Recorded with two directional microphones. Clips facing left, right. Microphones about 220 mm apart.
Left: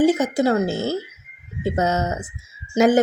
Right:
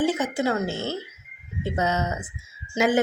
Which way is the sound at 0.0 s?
40° left (ahead or behind).